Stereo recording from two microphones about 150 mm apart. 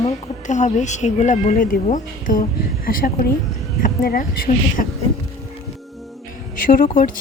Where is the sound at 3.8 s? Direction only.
75° left (ahead or behind).